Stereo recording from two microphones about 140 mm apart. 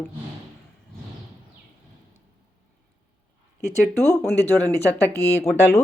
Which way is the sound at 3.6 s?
20° left (ahead or behind).